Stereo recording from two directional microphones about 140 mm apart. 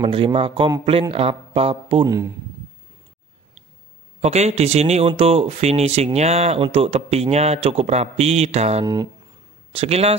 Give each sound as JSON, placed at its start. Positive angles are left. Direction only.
{"t": 0.0, "sound": "speech", "side_deg": -40}
{"t": 2.0, "sound": "speech", "side_deg": -25}
{"t": 4.2, "sound": "speech", "side_deg": -50}
{"t": 8.8, "sound": "speech", "side_deg": -30}
{"t": 9.7, "sound": "speech", "side_deg": -45}